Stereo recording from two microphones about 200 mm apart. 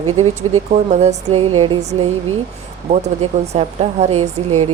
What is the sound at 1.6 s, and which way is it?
Music, 30° right (ahead or behind).